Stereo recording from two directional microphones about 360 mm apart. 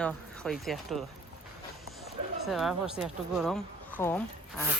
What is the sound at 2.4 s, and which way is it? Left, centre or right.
Speech, centre.